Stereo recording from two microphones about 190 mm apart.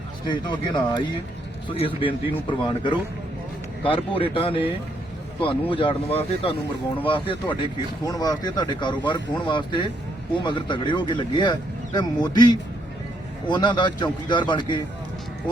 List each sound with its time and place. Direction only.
0.3 s speech: 25° left (ahead or behind)
5.7 s speech: 25° left (ahead or behind)